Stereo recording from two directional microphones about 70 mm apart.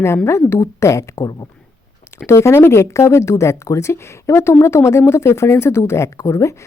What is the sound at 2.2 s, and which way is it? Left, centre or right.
Speech, left.